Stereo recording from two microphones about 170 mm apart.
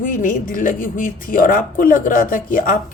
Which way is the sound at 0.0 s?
55° left (ahead or behind).